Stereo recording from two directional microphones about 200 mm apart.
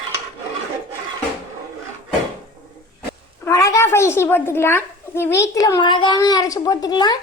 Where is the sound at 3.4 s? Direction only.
15° left (ahead or behind).